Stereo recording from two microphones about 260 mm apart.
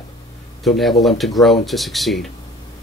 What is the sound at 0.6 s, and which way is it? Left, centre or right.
Speech, centre.